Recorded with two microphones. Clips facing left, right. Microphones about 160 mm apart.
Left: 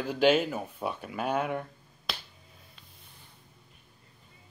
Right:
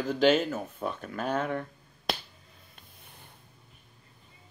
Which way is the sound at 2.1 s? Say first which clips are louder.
Right 6 dB; 50° right (ahead or behind).